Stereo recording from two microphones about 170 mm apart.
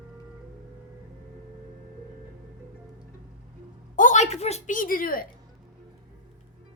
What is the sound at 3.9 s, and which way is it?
A woman's voice, 50° left (ahead or behind).